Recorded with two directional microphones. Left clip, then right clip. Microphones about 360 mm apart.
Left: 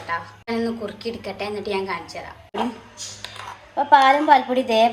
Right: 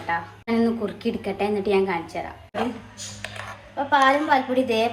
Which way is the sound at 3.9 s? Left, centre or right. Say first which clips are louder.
Left 5 dB; centre.